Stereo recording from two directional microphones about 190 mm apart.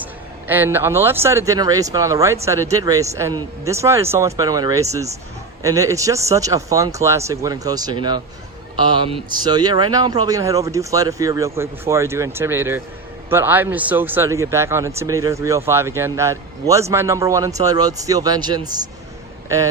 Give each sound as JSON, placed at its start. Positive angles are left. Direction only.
{"t": 0.0, "sound": "speech", "side_deg": -10}